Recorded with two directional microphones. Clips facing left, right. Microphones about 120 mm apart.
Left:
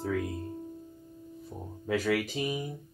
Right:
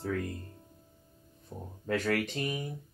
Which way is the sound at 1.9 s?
5° left (ahead or behind).